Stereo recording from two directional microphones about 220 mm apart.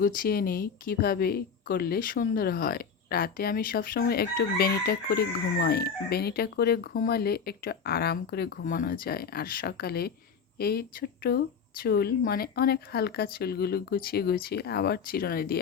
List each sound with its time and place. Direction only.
0.0 s speech: 40° left (ahead or behind)